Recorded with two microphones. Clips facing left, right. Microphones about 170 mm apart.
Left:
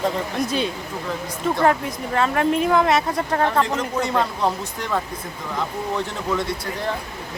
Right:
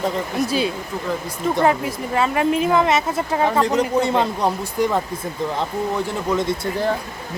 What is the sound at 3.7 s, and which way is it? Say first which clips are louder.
Speech: right 4 dB; 25° right (ahead or behind).